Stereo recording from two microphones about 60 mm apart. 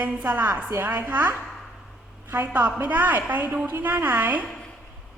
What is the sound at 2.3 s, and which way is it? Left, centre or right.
A woman's voice, right.